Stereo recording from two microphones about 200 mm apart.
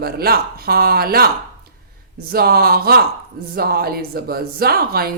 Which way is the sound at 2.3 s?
50° right (ahead or behind).